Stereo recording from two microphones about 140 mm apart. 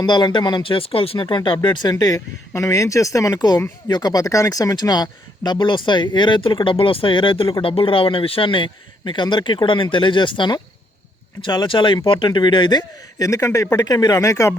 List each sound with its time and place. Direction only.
0.0 s a man's voice: 30° left (ahead or behind)